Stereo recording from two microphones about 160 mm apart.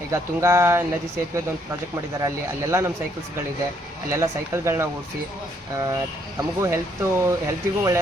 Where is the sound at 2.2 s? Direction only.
20° right (ahead or behind).